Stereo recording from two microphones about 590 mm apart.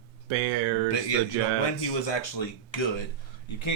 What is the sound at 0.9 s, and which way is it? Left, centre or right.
Speech, left.